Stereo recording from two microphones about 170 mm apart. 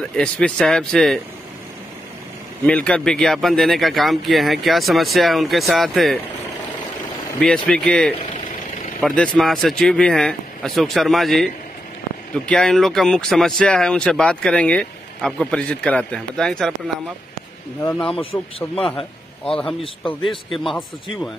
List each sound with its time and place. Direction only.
0.1 s speech: 5° left (ahead or behind)
2.6 s speech: 5° left (ahead or behind)
7.3 s speech: 5° left (ahead or behind)
17.9 s a man's voice: 5° left (ahead or behind)